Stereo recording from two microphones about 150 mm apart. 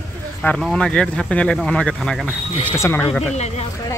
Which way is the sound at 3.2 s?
45° left (ahead or behind).